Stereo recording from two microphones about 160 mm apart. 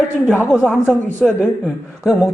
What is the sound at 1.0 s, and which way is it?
Speech, 10° left (ahead or behind).